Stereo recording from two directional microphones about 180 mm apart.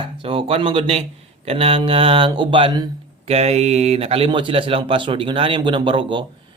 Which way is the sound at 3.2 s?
35° right (ahead or behind).